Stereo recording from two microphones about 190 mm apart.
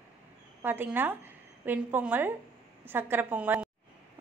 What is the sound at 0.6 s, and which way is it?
A woman's voice, 10° right (ahead or behind).